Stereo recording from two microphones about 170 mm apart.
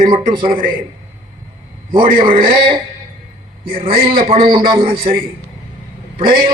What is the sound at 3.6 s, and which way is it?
Speech, 60° right (ahead or behind).